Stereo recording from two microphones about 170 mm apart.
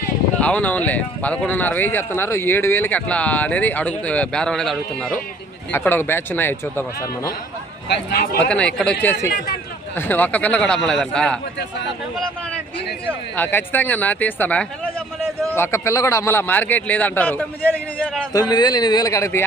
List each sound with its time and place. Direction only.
0.3 s speech: 10° left (ahead or behind)
7.9 s speech: 70° left (ahead or behind)
8.4 s a man's voice: 5° left (ahead or behind)
13.1 s speech: 10° left (ahead or behind)
18.3 s a man's voice: 25° left (ahead or behind)